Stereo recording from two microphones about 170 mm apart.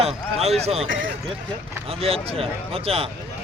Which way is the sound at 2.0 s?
35° right (ahead or behind).